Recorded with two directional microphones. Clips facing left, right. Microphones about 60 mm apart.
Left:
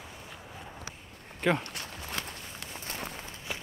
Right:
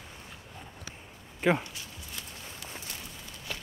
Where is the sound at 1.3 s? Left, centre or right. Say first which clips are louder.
Right 1 dB; centre.